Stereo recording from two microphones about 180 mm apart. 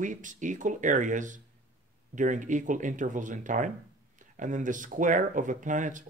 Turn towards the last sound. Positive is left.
turn(degrees=-45)  # may be behind; listen again after turning